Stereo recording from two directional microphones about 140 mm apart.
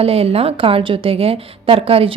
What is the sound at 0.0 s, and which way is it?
A woman's voice, 45° right (ahead or behind).